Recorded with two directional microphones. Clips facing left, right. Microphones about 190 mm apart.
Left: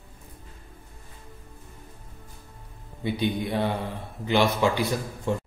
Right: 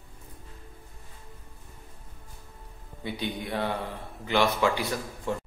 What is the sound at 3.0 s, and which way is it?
A man's voice, 20° left (ahead or behind).